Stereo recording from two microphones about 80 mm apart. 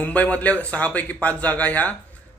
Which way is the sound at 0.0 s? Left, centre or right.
Centre.